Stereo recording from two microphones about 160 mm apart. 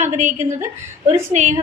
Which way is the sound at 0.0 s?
45° right (ahead or behind).